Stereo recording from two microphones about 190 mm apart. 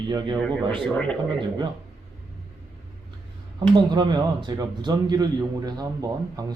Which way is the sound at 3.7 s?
25° right (ahead or behind).